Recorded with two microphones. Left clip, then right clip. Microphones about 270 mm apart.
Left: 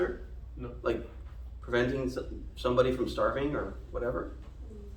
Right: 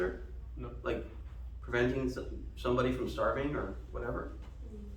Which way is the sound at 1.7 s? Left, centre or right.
Left.